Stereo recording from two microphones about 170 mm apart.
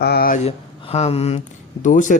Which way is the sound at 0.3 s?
35° left (ahead or behind).